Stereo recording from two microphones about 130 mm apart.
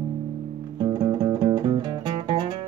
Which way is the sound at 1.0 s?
35° right (ahead or behind).